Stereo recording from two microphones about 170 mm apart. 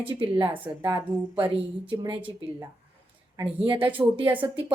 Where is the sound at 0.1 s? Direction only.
30° right (ahead or behind).